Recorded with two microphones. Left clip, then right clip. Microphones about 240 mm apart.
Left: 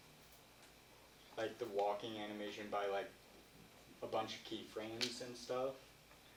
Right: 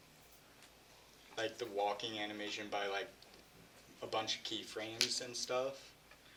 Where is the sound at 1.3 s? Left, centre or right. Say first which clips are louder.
Right 2 dB; right.